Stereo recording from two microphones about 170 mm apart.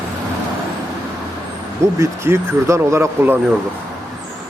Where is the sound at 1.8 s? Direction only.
15° right (ahead or behind).